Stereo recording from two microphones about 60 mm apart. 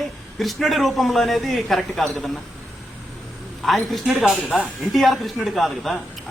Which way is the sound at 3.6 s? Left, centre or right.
Centre.